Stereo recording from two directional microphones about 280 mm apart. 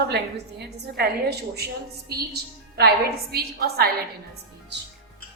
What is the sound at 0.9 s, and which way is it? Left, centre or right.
A woman's voice, right.